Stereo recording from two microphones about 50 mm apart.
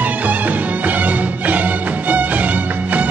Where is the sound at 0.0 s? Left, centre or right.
Right.